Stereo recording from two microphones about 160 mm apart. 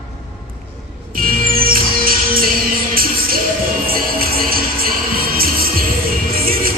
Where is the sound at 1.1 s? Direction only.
65° right (ahead or behind).